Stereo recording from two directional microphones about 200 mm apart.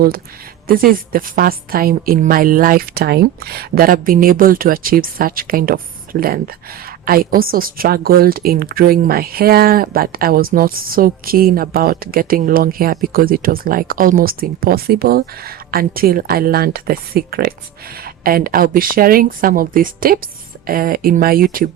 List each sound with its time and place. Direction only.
0.7 s a woman's voice: 45° right (ahead or behind)